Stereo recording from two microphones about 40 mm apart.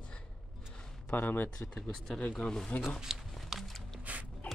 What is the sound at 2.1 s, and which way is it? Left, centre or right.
Speech, left.